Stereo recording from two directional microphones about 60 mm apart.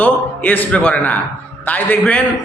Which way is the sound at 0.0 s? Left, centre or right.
Left.